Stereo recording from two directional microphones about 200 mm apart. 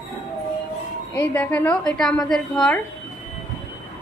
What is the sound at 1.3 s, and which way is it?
A woman's voice, 10° left (ahead or behind).